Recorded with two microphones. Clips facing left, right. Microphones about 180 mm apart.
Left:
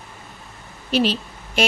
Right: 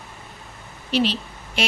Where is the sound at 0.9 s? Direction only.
45° left (ahead or behind).